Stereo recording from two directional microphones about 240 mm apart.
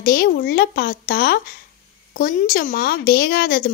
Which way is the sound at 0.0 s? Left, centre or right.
Left.